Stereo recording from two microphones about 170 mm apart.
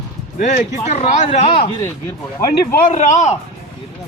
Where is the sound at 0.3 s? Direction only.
45° left (ahead or behind).